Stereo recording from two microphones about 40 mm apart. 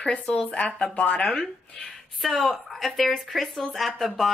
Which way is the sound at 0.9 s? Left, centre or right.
Left.